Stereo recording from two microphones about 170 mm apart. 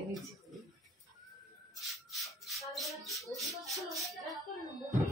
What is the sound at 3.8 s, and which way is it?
Speech, centre (ahead or behind).